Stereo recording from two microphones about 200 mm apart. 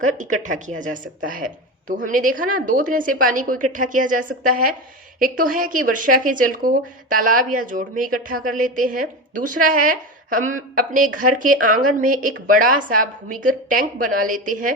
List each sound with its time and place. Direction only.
0.0 s speech: 40° right (ahead or behind)